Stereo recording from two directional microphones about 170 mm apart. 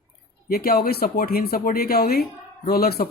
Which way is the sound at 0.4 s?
60° left (ahead or behind).